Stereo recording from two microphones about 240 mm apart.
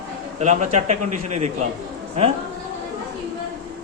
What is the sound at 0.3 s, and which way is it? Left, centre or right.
Speech, right.